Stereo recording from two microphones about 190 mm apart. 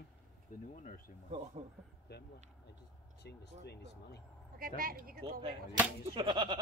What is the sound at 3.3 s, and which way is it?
Speech, 60° left (ahead or behind).